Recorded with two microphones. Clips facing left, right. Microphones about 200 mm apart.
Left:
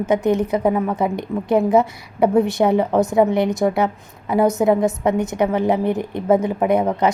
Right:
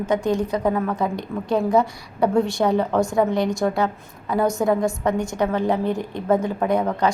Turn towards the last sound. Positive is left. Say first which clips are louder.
# left 3 dB
turn(degrees=20)  # may be behind; listen again after turning